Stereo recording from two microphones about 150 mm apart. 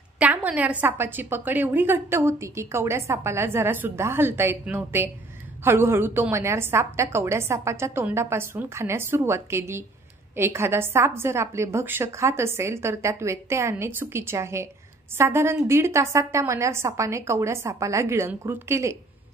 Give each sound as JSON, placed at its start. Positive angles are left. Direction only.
{"t": 0.2, "sound": "a woman's voice", "side_deg": -10}